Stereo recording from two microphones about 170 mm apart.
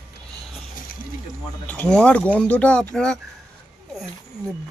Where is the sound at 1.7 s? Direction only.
5° left (ahead or behind).